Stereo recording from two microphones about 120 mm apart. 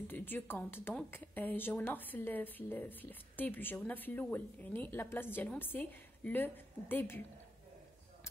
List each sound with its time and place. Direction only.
0.1 s a woman's voice: 15° left (ahead or behind)